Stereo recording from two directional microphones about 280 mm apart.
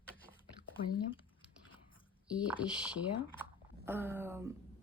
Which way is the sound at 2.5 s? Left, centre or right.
Centre.